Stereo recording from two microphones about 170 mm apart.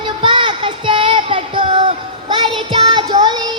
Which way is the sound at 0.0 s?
30° right (ahead or behind).